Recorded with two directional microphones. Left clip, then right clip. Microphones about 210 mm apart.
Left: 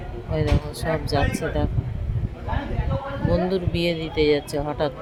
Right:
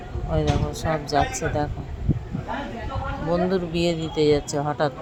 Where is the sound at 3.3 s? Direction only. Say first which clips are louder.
Right 1 dB; 5° right (ahead or behind).